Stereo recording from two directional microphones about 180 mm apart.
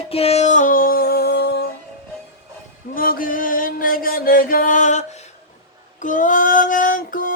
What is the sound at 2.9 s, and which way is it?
Music, 50° left (ahead or behind).